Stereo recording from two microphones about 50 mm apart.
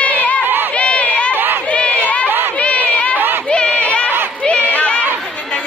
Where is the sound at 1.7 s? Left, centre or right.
Left.